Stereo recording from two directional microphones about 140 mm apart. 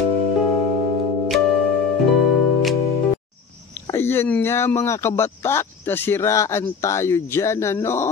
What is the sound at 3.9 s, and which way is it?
Speech, 15° left (ahead or behind).